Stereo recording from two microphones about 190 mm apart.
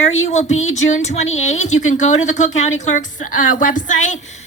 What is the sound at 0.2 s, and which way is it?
A woman's voice, 35° left (ahead or behind).